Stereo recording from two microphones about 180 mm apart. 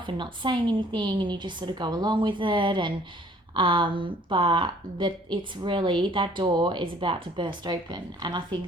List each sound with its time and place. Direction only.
0.0 s speech: 25° right (ahead or behind)